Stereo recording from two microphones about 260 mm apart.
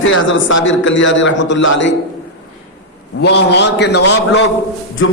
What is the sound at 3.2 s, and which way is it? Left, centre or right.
A man's voice, left.